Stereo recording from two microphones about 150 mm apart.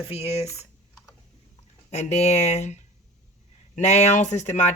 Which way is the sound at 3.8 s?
50° left (ahead or behind).